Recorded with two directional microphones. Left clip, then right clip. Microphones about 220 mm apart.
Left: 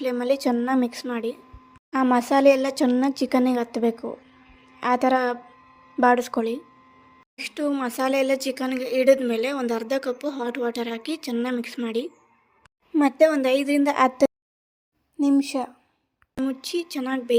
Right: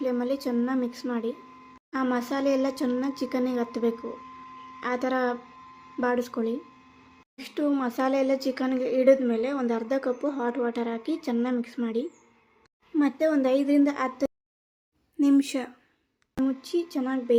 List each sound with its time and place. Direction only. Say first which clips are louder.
0.0 s speech: left 5 dB; 35° left (ahead or behind)
15.2 s speech: left 1 dB; 10° left (ahead or behind)
16.4 s speech: even; 40° left (ahead or behind)